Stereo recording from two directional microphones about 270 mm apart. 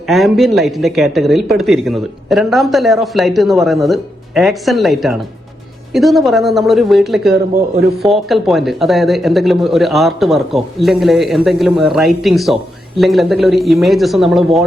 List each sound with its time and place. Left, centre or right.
0.1 s speech: centre